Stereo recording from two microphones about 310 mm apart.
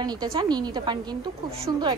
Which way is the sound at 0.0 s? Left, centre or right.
Centre.